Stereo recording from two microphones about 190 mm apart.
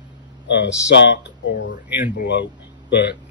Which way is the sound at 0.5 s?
70° left (ahead or behind).